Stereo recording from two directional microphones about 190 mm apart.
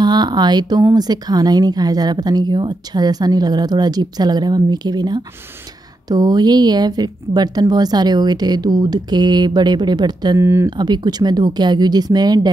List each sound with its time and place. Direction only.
0.0 s a woman's voice: 20° right (ahead or behind)